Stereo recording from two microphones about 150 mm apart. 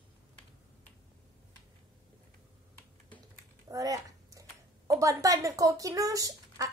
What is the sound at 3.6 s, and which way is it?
Speech, 25° right (ahead or behind).